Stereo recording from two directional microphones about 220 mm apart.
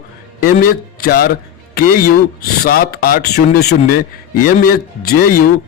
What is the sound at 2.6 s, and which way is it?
A man's voice, 45° left (ahead or behind).